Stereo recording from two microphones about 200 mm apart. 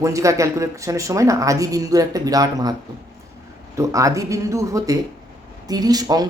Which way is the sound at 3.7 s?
15° right (ahead or behind).